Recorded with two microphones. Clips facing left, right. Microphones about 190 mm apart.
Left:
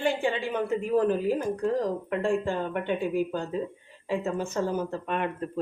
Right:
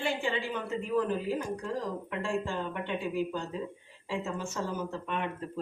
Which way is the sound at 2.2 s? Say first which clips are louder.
Left 5 dB; 55° left (ahead or behind).